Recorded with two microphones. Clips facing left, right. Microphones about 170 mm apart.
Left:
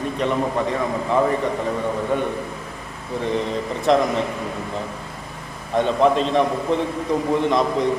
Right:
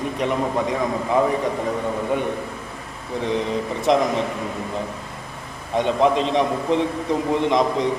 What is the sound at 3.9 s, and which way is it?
Speech, 15° right (ahead or behind).